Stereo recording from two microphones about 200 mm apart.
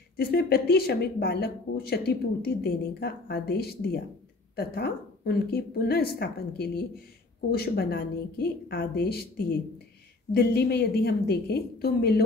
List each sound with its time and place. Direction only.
0.2 s a woman's voice: 50° left (ahead or behind)